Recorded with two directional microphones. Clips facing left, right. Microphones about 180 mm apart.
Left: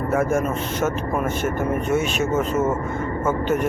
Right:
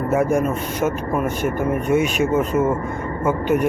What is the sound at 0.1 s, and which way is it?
Speech, 15° right (ahead or behind).